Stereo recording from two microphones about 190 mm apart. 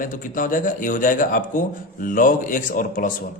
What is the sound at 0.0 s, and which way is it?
A man's voice, 45° left (ahead or behind).